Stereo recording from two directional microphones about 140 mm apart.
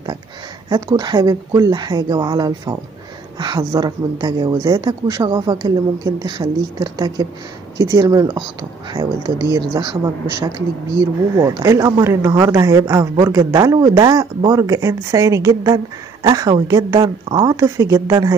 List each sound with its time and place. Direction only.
0.7 s a woman's voice: 25° right (ahead or behind)